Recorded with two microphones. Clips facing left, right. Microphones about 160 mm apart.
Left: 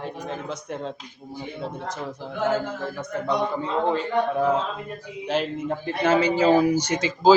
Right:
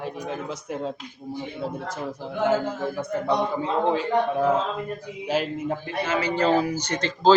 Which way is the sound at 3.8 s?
Centre (ahead or behind).